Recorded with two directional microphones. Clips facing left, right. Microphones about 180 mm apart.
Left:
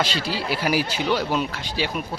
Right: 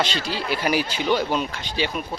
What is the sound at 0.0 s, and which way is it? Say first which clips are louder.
Speech: even; 5° left (ahead or behind).